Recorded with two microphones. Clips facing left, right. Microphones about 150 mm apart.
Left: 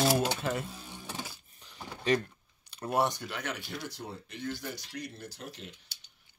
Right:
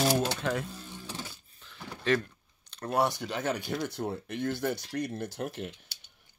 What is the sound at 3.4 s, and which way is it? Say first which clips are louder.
Speech: right 9 dB; 40° right (ahead or behind).